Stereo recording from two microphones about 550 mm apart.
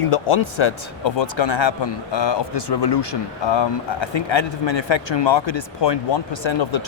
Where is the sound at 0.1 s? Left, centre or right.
Left.